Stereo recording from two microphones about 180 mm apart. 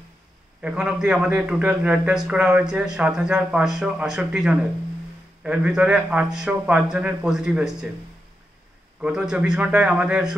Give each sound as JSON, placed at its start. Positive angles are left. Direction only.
{"t": 0.6, "sound": "a man's voice", "side_deg": -5}
{"t": 9.0, "sound": "a man's voice", "side_deg": -5}